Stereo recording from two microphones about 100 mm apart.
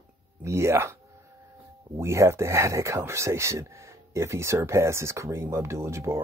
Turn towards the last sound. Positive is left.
turn(degrees=-30)  # may be behind; listen again after turning